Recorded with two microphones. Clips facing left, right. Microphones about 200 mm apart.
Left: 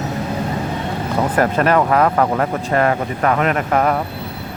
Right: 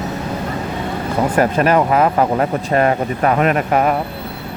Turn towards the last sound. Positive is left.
turn(degrees=-15)  # may be behind; listen again after turning